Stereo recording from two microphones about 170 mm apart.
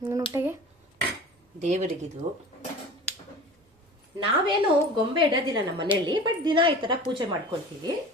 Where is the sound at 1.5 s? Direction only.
45° right (ahead or behind).